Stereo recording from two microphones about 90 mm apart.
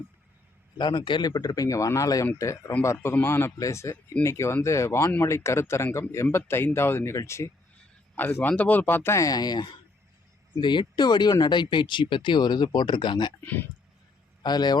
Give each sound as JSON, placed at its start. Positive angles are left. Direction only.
{"t": 0.8, "sound": "speech", "side_deg": 60}
{"t": 9.1, "sound": "speech", "side_deg": 45}
{"t": 13.4, "sound": "speech", "side_deg": 20}
{"t": 14.4, "sound": "speech", "side_deg": 50}